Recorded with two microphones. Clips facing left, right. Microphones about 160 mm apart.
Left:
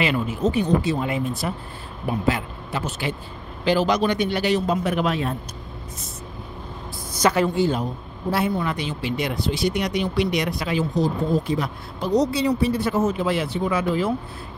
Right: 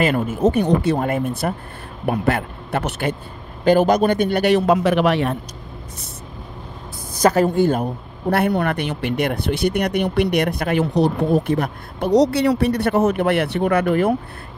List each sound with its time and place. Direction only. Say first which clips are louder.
0.0 s speech: right 5 dB; 45° right (ahead or behind); by 5.4 s 70° right (ahead or behind)
7.2 s speech: right 4 dB; 40° right (ahead or behind); by 14.1 s 60° right (ahead or behind)